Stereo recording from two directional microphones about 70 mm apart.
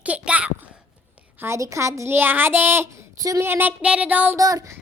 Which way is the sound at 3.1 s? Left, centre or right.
Right.